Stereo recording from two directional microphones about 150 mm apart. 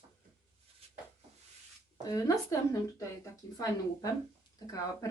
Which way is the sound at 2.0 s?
20° left (ahead or behind).